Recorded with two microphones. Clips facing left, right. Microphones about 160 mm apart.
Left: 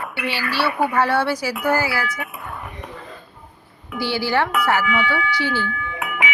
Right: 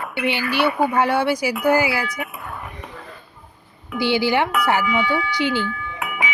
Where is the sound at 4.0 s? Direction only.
15° right (ahead or behind).